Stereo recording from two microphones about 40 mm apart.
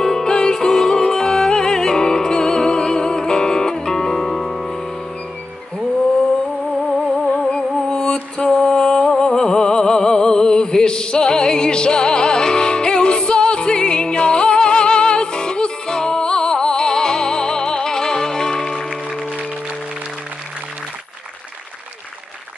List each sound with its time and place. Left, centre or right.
0.0 s music: centre
7.3 s music: centre